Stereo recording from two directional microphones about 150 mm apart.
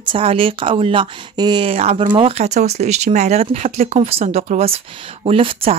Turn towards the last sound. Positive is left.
turn(degrees=-40)  # may be behind; listen again after turning